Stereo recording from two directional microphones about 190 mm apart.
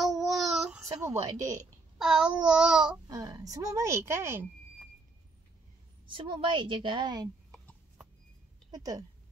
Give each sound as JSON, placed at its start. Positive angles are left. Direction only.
{"t": 0.0, "sound": "a sound", "side_deg": 0}
{"t": 0.7, "sound": "a woman's voice", "side_deg": -15}
{"t": 2.0, "sound": "child singing", "side_deg": -5}
{"t": 3.1, "sound": "a woman's voice", "side_deg": -20}
{"t": 6.0, "sound": "a woman's voice", "side_deg": -25}
{"t": 7.5, "sound": "a sound", "side_deg": 0}
{"t": 8.7, "sound": "a woman's voice", "side_deg": -20}